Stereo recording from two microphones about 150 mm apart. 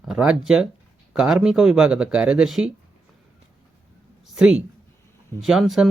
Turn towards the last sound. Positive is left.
turn(degrees=0)  # may be behind; listen again after turning